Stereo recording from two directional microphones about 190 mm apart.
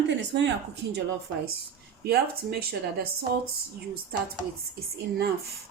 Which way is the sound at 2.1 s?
55° right (ahead or behind).